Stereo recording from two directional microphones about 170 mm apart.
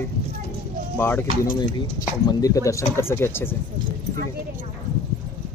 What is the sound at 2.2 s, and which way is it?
Speech, 20° left (ahead or behind).